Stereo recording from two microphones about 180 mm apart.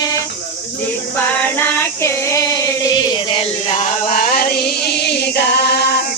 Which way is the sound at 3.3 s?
40° left (ahead or behind).